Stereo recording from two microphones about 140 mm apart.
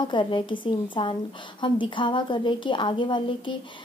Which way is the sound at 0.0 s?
35° left (ahead or behind).